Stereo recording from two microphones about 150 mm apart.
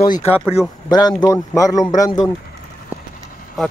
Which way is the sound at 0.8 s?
25° left (ahead or behind).